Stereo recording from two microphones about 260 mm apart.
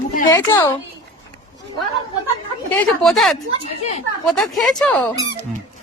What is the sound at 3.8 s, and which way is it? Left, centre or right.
Speech, left.